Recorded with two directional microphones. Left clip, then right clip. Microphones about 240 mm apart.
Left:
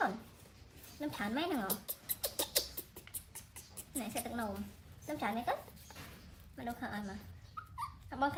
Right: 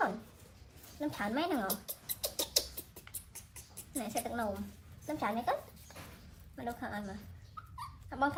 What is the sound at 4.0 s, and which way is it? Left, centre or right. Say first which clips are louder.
A woman's voice: right 4 dB; centre.